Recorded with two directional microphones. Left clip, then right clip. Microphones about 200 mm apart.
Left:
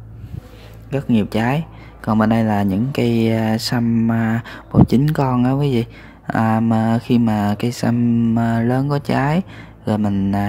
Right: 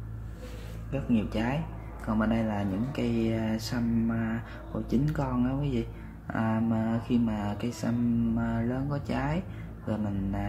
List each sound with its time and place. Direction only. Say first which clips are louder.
0.8 s speech: left 11 dB; 45° left (ahead or behind)